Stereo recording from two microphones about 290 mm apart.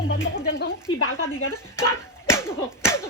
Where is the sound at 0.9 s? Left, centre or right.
Centre.